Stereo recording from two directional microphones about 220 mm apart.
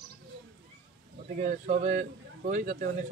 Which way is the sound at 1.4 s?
35° right (ahead or behind).